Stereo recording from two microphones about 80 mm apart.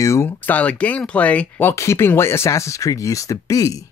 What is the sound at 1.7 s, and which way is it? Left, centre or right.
Speech, left.